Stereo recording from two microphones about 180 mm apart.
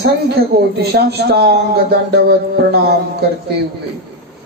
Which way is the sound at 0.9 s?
65° right (ahead or behind).